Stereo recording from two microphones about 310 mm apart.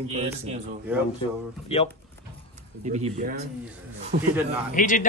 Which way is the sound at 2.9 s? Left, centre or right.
Right.